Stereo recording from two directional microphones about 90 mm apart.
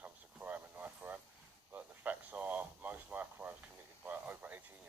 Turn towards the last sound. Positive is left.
turn(degrees=-20)  # may be behind; listen again after turning